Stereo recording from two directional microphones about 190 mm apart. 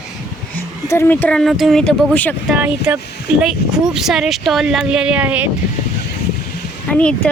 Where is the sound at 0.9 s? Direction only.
10° left (ahead or behind).